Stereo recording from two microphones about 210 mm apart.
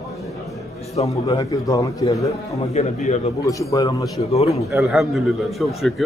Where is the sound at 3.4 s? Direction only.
15° left (ahead or behind).